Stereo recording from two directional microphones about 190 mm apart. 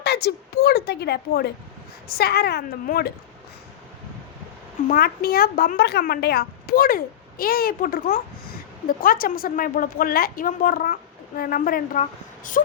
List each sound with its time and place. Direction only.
0.0 s a woman's voice: 60° left (ahead or behind)
4.9 s a woman's voice: 50° left (ahead or behind)